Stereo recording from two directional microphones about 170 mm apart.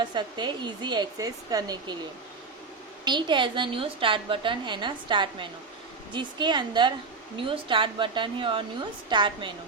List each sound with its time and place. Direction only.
0.0 s a woman's voice: 25° right (ahead or behind)
3.0 s a woman's voice: 25° right (ahead or behind)